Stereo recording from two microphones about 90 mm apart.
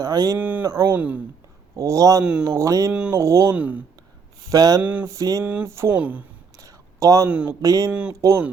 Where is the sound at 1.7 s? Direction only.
35° right (ahead or behind).